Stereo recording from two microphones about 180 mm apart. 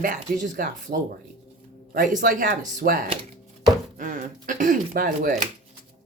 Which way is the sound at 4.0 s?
45° right (ahead or behind).